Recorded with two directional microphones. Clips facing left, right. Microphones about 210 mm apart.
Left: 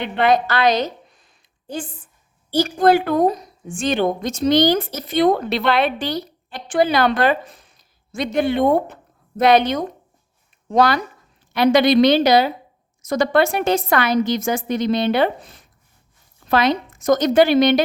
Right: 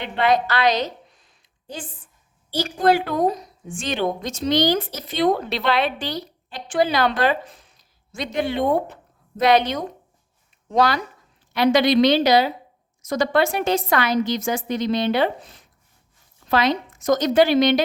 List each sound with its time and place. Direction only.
0.2 s a woman's voice: 50° left (ahead or behind)
2.5 s a woman's voice: 50° left (ahead or behind)